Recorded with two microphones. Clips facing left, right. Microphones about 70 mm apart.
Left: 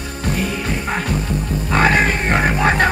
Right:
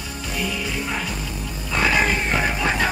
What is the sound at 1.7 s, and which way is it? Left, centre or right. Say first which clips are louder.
Music: left 4 dB; left.